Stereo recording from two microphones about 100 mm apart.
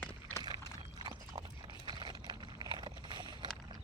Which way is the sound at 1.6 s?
50° right (ahead or behind).